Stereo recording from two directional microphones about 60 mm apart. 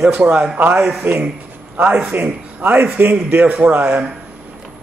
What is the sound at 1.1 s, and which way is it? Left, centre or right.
A man's voice, right.